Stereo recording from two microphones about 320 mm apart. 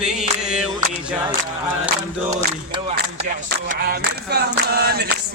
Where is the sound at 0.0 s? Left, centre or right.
Centre.